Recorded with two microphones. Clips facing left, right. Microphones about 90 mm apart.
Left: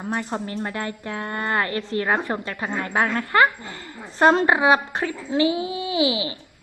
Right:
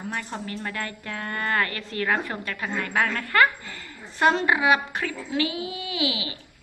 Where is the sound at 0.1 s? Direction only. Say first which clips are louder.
Left 7 dB; 30° left (ahead or behind).